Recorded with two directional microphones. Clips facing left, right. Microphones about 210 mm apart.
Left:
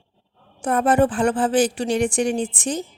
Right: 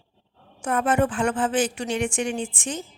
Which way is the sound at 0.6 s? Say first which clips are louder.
Left 4 dB; 35° left (ahead or behind).